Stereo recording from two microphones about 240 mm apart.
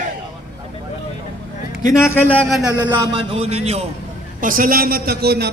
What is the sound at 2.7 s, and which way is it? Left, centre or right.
A man's voice, right.